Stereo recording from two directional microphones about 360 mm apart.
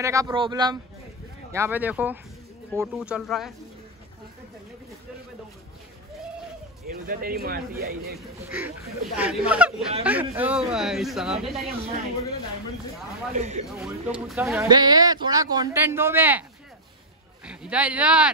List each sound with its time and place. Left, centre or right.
0.0 s a man's voice: centre
6.9 s speech: right
8.5 s a man's voice: centre
13.4 s speech: centre
13.7 s speech: centre
17.5 s a man's voice: centre